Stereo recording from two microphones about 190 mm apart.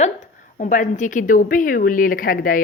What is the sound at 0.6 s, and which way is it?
A woman's voice, 40° left (ahead or behind).